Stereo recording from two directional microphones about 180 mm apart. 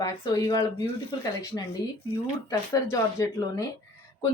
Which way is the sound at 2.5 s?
20° left (ahead or behind).